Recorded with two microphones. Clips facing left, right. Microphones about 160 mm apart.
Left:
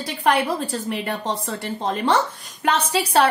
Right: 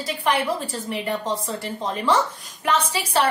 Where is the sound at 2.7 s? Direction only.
65° left (ahead or behind).